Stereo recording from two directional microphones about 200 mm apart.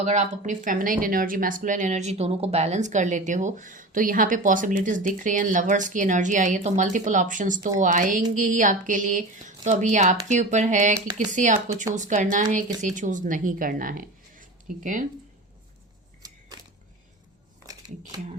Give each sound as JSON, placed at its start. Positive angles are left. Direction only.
{"t": 0.0, "sound": "speech", "side_deg": -35}